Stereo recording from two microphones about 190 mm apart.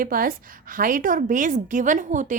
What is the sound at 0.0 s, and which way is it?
A woman's voice, 50° right (ahead or behind).